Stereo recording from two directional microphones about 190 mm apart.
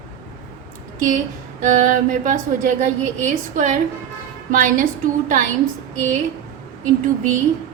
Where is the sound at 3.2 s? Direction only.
40° right (ahead or behind).